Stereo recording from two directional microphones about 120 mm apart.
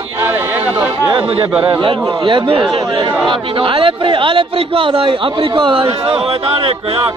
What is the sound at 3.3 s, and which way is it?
A man's voice, 45° right (ahead or behind).